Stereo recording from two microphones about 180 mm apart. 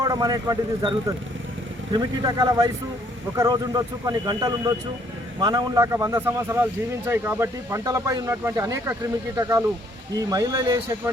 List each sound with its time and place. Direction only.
0.0 s a man's voice: 20° right (ahead or behind)